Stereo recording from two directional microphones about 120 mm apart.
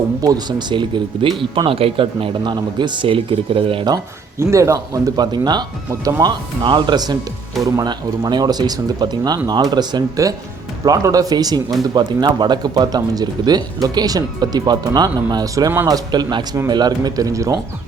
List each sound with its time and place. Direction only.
0.2 s speech: 30° right (ahead or behind); by 3.8 s 50° right (ahead or behind)
4.4 s speech: 25° right (ahead or behind)